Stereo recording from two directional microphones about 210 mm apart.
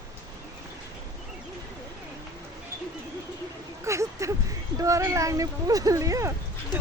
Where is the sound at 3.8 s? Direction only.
15° right (ahead or behind).